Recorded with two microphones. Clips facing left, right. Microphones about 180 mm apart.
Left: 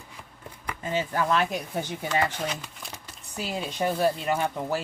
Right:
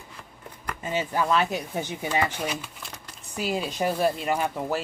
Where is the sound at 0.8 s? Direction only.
10° right (ahead or behind).